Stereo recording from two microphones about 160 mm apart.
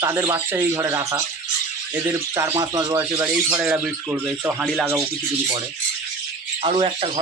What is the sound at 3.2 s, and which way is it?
A man's voice, 10° right (ahead or behind).